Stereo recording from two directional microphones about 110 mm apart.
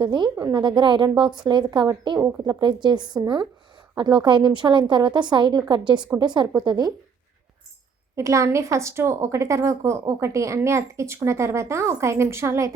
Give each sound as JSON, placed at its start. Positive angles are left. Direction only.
{"t": 0.0, "sound": "a woman's voice", "side_deg": -45}
{"t": 1.1, "sound": "a woman's voice", "side_deg": -5}
{"t": 1.5, "sound": "a woman's voice", "side_deg": -45}
{"t": 8.1, "sound": "a woman's voice", "side_deg": -30}